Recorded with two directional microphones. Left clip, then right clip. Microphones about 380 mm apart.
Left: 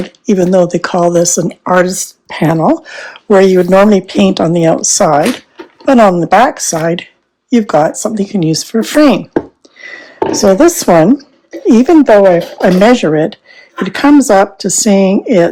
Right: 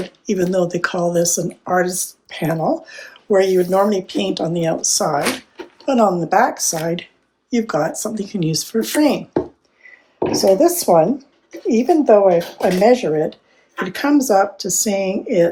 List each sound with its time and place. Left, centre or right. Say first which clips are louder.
0.3 s speech: left 9 dB; centre